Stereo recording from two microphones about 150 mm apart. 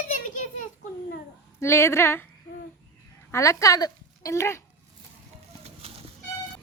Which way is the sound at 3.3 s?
20° left (ahead or behind).